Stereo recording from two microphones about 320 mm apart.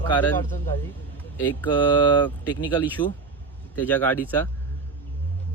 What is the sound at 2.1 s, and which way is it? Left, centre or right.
Speech, centre.